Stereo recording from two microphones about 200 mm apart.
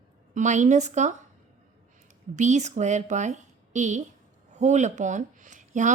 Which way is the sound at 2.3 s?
35° right (ahead or behind).